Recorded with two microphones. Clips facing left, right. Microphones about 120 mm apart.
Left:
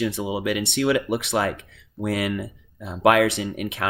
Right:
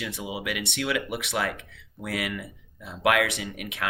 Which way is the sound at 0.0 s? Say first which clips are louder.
Left 8 dB; 35° left (ahead or behind).